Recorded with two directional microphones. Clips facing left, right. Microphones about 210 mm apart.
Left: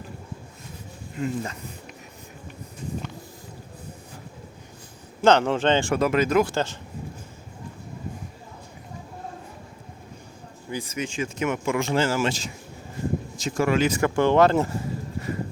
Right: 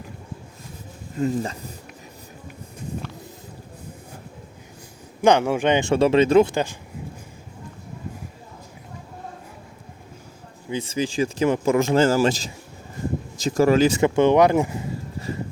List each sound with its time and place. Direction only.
1.2 s speech: 35° right (ahead or behind)
5.2 s speech: 10° right (ahead or behind)
5.9 s speech: 25° right (ahead or behind)
6.5 s speech: 15° right (ahead or behind)
10.7 s speech: 25° right (ahead or behind)